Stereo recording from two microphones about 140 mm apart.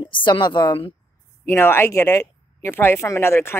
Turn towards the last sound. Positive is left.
turn(degrees=15)  # may be behind; listen again after turning